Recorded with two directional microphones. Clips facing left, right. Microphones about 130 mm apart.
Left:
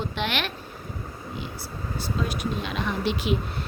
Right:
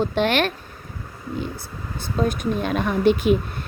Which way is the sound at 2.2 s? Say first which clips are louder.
Right 8 dB; 50° right (ahead or behind).